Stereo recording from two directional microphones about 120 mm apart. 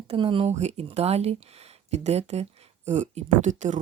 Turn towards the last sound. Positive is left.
turn(degrees=-90)